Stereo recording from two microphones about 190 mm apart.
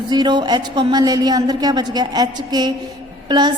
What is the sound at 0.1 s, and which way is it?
A woman's voice, 20° right (ahead or behind).